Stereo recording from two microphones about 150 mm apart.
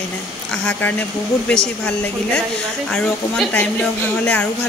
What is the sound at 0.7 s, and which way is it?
Speech, 10° left (ahead or behind).